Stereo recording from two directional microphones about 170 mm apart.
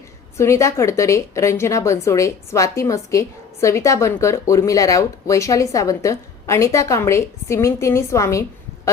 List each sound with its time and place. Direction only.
0.3 s a woman's voice: 15° left (ahead or behind)